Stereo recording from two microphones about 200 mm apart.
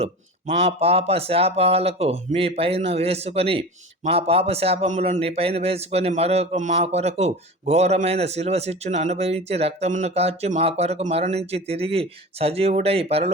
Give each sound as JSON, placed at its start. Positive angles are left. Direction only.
{"t": 0.6, "sound": "a man's voice", "side_deg": -30}